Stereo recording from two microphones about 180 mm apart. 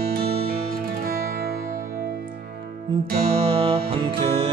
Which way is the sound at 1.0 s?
55° right (ahead or behind).